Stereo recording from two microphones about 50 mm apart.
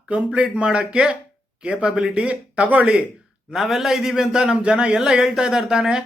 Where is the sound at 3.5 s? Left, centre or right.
Centre.